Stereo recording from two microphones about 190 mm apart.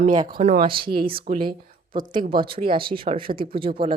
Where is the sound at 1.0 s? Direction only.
30° right (ahead or behind).